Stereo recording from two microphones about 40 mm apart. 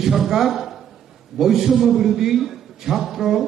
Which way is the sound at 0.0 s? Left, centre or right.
Centre.